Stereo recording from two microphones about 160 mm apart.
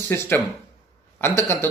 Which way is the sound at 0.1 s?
15° left (ahead or behind).